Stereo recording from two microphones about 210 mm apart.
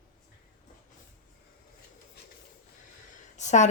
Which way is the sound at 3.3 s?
35° left (ahead or behind).